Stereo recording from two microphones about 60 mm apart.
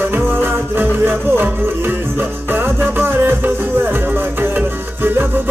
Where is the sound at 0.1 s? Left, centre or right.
Right.